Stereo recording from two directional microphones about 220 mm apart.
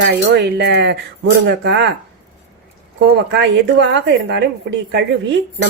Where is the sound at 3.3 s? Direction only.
50° right (ahead or behind).